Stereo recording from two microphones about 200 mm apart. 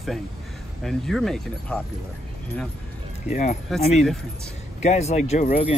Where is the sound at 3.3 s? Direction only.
35° left (ahead or behind).